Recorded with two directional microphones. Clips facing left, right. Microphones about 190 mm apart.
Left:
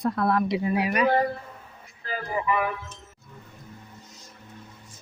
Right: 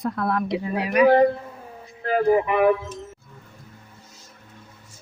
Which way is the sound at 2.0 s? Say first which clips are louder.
Right 11 dB; 65° right (ahead or behind).